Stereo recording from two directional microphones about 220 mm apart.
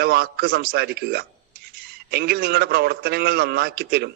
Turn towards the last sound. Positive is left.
turn(degrees=-45)  # may be behind; listen again after turning